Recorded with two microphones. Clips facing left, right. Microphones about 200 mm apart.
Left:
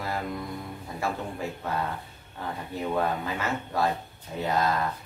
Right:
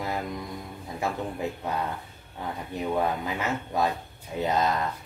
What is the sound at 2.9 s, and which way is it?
Speech, 15° right (ahead or behind).